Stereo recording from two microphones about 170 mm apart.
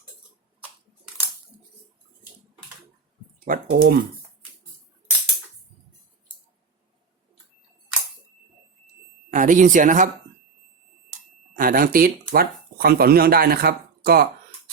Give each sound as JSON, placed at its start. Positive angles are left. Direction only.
{"t": 3.4, "sound": "speech", "side_deg": -60}
{"t": 9.3, "sound": "speech", "side_deg": -50}
{"t": 11.1, "sound": "speech", "side_deg": -55}